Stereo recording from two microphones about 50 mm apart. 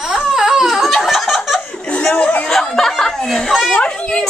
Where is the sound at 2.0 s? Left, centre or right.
Left.